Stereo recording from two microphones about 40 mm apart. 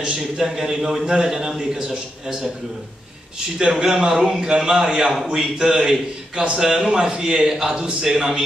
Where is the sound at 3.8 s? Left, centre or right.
Centre.